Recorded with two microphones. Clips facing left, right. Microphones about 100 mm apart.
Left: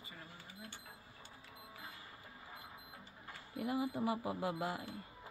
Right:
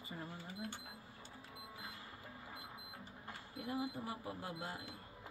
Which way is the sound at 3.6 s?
90° left.